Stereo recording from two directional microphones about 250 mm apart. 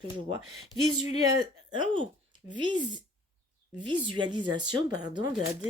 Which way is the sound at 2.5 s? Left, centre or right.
Centre.